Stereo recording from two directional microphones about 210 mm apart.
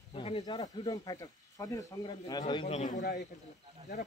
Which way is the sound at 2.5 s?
30° left (ahead or behind).